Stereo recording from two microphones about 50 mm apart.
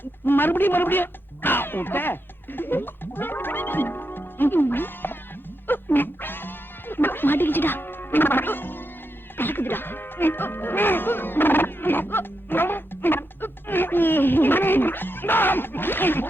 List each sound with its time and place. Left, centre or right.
0.0 s speech: left
5.6 s music: left
9.4 s speech: left